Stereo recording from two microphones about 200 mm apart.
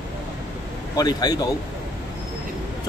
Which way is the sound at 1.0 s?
20° left (ahead or behind).